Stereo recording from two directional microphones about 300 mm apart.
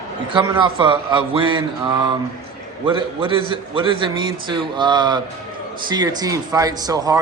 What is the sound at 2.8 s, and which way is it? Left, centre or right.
Speech, centre.